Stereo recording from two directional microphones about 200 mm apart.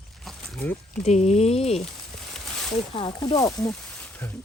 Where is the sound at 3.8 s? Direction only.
5° left (ahead or behind).